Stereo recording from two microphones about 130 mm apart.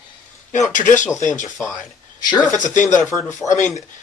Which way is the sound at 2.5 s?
70° left (ahead or behind).